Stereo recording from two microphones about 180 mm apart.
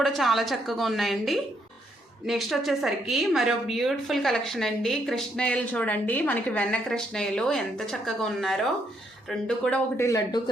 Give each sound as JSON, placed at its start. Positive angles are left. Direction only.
{"t": 0.0, "sound": "a woman's voice", "side_deg": 0}